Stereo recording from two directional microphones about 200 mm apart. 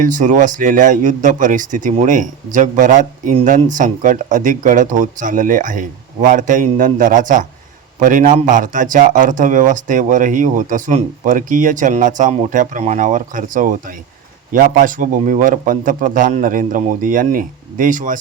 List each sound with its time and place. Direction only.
0.0 s a man's voice: 40° right (ahead or behind)